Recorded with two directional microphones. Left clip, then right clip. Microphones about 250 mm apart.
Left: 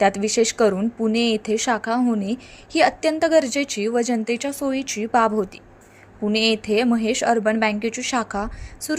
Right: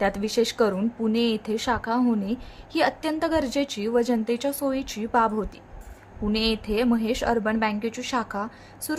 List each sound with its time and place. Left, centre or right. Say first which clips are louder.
0.0 s speech: left 5 dB; centre